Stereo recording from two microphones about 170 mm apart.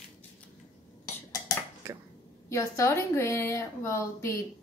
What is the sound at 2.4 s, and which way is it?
Speech, 15° left (ahead or behind).